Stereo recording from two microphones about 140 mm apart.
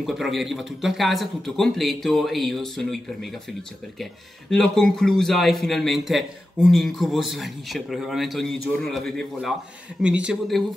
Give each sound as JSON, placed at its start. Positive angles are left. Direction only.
{"t": 0.0, "sound": "a man's voice", "side_deg": 0}